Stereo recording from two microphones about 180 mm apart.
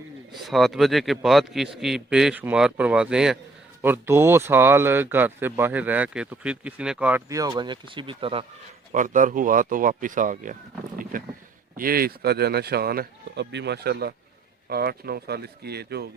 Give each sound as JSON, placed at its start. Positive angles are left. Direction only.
{"t": 0.3, "sound": "a man's voice", "side_deg": 0}
{"t": 8.9, "sound": "speech", "side_deg": -45}